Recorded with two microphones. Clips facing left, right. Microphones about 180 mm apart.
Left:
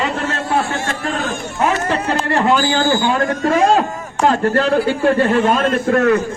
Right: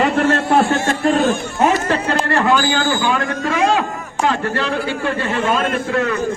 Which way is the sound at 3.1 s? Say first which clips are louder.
Left 4 dB; 40° left (ahead or behind).